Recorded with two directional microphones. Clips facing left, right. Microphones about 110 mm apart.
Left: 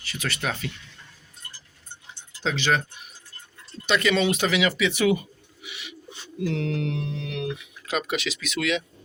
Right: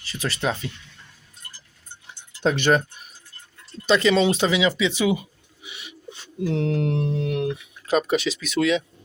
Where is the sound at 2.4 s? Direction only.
50° right (ahead or behind).